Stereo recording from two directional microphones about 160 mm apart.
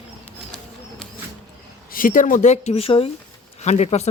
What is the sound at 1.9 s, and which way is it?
Speech, 60° left (ahead or behind).